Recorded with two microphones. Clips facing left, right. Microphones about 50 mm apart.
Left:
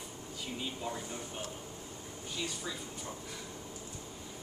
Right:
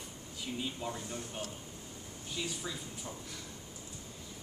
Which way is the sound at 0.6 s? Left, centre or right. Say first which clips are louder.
Even; centre.